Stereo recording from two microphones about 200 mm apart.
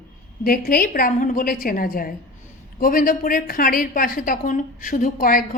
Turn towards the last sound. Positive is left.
turn(degrees=45)  # may be behind; listen again after turning